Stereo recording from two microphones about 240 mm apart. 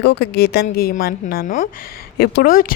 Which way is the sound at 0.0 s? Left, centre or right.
Left.